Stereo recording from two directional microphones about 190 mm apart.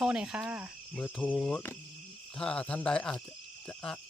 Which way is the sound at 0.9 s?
10° left (ahead or behind).